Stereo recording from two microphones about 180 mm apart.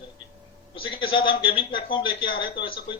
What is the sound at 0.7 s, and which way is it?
A man's voice, 30° left (ahead or behind).